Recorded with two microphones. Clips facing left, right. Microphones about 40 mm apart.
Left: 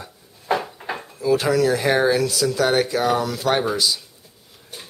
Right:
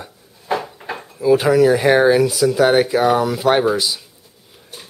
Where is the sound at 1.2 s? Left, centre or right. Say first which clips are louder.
Right 6 dB; centre.